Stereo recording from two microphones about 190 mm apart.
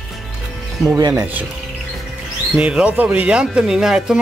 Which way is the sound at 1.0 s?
20° right (ahead or behind).